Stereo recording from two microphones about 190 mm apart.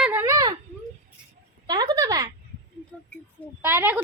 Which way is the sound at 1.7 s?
20° right (ahead or behind).